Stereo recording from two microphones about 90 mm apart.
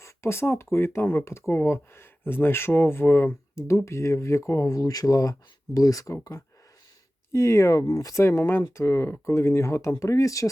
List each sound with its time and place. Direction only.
0.0 s speech: 30° left (ahead or behind)
7.3 s speech: 30° left (ahead or behind)